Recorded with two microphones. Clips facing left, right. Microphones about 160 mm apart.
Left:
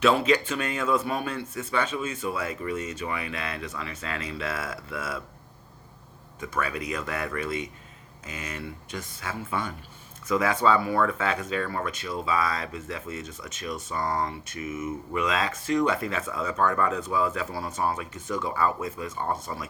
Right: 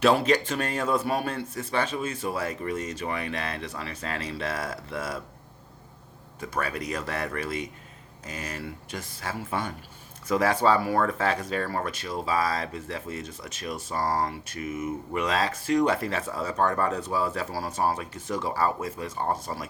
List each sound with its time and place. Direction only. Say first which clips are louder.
0.0 s speech: even; 35° right (ahead or behind)
6.4 s speech: even; 40° right (ahead or behind)